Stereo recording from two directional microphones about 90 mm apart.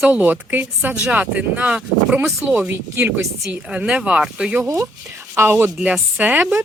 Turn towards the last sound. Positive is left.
turn(degrees=-20)  # may be behind; listen again after turning